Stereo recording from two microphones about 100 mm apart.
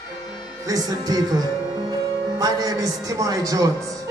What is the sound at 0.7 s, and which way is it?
Music, 40° right (ahead or behind).